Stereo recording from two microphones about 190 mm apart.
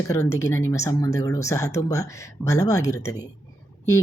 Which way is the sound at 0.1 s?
15° left (ahead or behind).